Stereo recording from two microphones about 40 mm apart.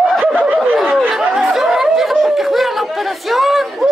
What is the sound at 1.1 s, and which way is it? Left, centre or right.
Chatter, centre.